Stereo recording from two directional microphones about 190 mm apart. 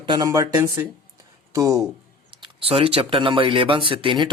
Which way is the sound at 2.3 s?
30° right (ahead or behind).